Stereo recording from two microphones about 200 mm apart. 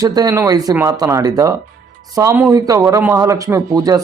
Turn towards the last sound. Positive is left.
turn(degrees=-15)  # may be behind; listen again after turning